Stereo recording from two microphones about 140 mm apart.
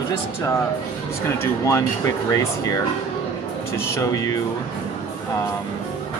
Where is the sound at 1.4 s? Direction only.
20° left (ahead or behind).